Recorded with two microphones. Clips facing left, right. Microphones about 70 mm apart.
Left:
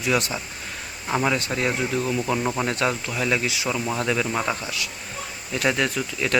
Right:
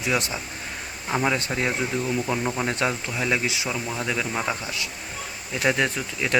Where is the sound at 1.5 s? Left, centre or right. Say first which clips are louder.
Left 1 dB; centre.